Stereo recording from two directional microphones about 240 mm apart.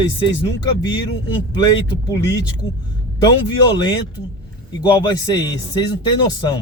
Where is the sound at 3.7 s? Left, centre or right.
Centre.